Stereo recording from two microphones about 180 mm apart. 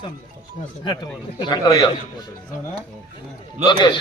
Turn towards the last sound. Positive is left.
turn(degrees=25)  # may be behind; listen again after turning